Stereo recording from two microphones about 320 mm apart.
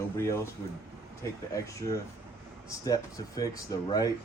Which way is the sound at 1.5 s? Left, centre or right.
Centre.